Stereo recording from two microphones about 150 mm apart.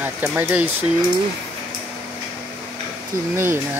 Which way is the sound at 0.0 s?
10° right (ahead or behind).